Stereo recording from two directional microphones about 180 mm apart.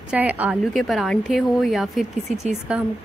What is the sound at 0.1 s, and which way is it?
A woman's voice, 10° right (ahead or behind).